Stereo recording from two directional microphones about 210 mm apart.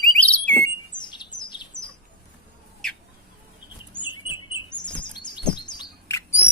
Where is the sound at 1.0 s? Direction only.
20° left (ahead or behind).